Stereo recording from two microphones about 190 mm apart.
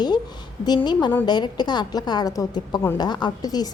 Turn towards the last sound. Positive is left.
turn(degrees=20)  # may be behind; listen again after turning